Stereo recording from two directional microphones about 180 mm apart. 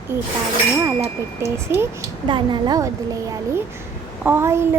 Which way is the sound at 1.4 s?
15° right (ahead or behind).